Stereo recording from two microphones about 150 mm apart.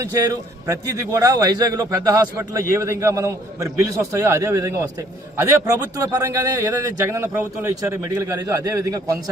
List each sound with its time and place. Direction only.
0.0 s a man's voice: 20° right (ahead or behind)